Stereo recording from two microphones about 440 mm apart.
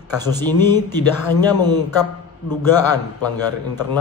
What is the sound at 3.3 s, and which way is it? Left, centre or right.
Speech, centre.